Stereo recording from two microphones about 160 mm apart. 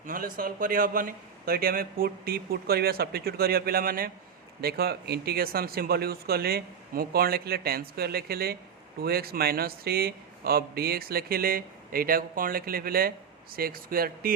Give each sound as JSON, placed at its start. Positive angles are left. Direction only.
{"t": 0.0, "sound": "a man's voice", "side_deg": -60}
{"t": 4.6, "sound": "a man's voice", "side_deg": -80}